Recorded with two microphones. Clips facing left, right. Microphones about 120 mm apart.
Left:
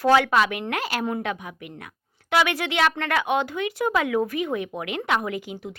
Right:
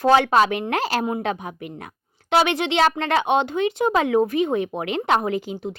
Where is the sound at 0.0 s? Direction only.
25° right (ahead or behind).